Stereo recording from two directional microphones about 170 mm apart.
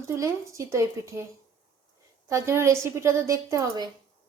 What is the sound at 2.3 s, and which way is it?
A woman's voice, 15° right (ahead or behind).